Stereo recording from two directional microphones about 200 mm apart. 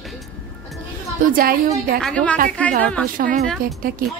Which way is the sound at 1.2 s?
45° right (ahead or behind).